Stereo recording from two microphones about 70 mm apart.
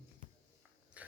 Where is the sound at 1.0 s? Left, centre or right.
Right.